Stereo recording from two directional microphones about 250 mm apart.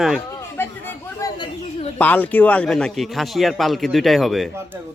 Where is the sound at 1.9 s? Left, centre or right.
Centre.